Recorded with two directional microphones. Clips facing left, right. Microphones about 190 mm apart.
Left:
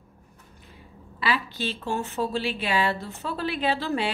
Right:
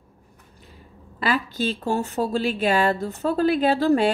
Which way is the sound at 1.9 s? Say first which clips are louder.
Right 3 dB; 40° right (ahead or behind).